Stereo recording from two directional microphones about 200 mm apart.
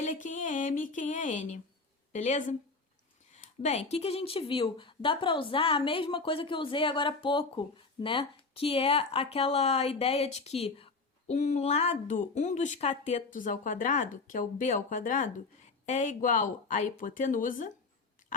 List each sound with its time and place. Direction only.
0.0 s speech: 40° left (ahead or behind)